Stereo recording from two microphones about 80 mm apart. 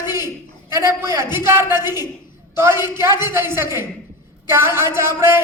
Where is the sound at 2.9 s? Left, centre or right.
Right.